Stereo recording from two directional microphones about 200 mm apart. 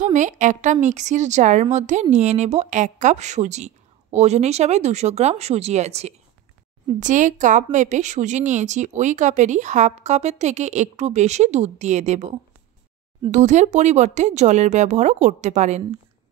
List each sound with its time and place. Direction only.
0.0 s a woman's voice: 40° right (ahead or behind)